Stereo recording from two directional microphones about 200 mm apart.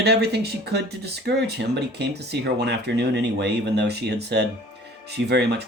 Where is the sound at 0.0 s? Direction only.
55° right (ahead or behind).